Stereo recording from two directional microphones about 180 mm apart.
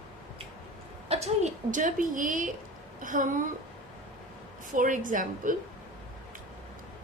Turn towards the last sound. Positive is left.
turn(degrees=-45)  # may be behind; listen again after turning